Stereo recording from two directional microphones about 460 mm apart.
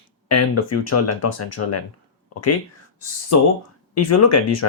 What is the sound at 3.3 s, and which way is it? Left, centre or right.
Speech, left.